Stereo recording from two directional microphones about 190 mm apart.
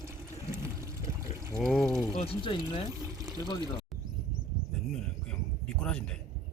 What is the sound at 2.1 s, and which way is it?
Speech, 25° left (ahead or behind).